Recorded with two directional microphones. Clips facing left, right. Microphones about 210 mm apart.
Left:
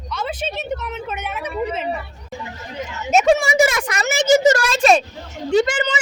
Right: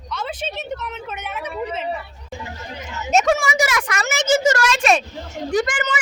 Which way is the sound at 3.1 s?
15° left (ahead or behind).